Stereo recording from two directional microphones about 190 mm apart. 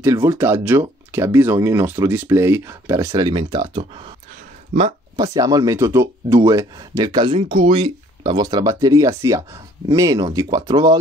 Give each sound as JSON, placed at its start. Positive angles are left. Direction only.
{"t": 0.0, "sound": "speech", "side_deg": -15}
{"t": 5.1, "sound": "speech", "side_deg": -20}